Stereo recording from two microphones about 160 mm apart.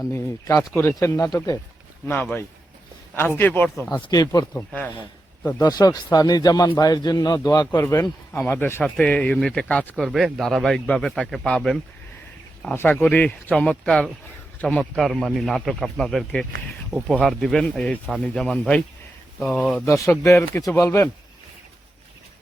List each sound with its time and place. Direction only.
0.0 s a man's voice: 20° left (ahead or behind)
3.2 s speech: 15° left (ahead or behind)
4.0 s a man's voice: 25° left (ahead or behind)
5.4 s speech: 10° left (ahead or behind)
5.6 s a man's voice: 25° left (ahead or behind); by 11.8 s centre (ahead or behind)
12.7 s a man's voice: 15° left (ahead or behind)
19.8 s a man's voice: 20° left (ahead or behind)